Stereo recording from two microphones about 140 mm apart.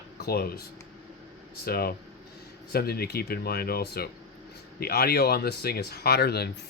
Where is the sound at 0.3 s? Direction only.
90° left.